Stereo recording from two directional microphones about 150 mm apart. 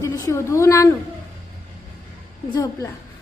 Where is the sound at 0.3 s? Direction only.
20° left (ahead or behind).